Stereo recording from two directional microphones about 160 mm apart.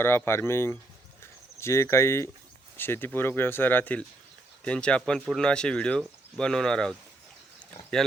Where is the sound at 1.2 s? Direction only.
15° left (ahead or behind).